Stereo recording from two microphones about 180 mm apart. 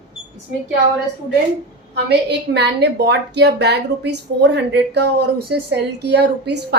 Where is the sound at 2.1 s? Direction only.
70° right (ahead or behind).